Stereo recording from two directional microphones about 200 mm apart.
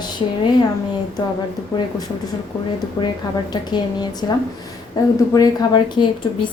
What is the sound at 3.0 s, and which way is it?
A woman's voice, 20° left (ahead or behind).